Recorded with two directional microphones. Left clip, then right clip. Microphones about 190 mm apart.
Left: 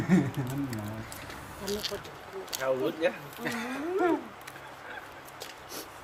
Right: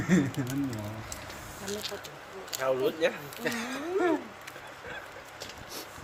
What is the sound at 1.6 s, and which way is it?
Speech, 5° left (ahead or behind).